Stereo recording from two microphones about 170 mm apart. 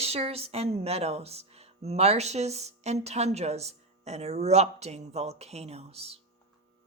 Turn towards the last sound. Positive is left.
turn(degrees=-35)  # may be behind; listen again after turning